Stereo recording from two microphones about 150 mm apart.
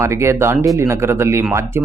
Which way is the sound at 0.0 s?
20° right (ahead or behind).